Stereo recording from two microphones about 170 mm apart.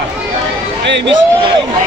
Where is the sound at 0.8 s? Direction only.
90° right.